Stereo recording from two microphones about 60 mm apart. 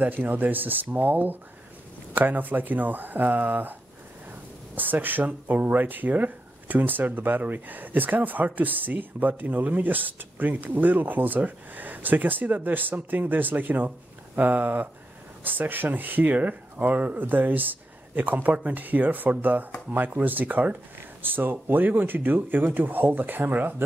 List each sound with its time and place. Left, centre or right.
0.0 s speech: right
4.7 s speech: right